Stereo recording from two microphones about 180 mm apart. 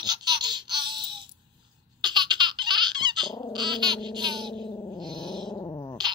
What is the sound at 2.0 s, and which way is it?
Baby laughter, 25° right (ahead or behind).